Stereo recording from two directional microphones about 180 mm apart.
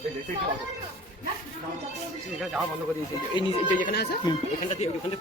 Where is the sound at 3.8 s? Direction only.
60° left (ahead or behind).